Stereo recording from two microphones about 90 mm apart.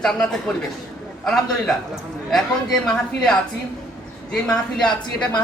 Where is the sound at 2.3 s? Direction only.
5° left (ahead or behind).